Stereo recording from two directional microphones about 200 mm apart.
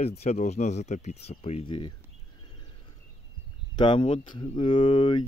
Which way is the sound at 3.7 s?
25° left (ahead or behind).